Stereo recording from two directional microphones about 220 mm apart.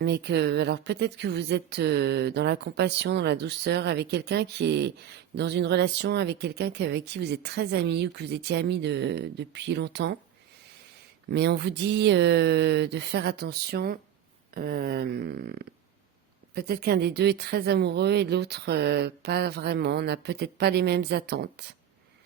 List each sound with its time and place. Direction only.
0.0 s speech: 50° right (ahead or behind)
11.3 s speech: 50° right (ahead or behind)